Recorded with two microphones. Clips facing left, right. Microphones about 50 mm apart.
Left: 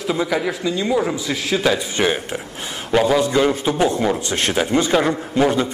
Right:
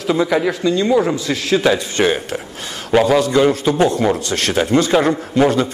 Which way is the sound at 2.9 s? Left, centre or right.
Centre.